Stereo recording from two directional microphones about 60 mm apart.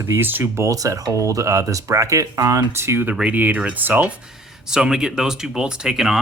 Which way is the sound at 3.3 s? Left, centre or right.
Right.